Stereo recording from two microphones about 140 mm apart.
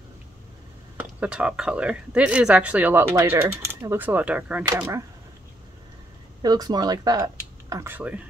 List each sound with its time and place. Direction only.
0.9 s speech: 10° right (ahead or behind)
6.4 s speech: 30° right (ahead or behind)
7.7 s speech: 15° right (ahead or behind)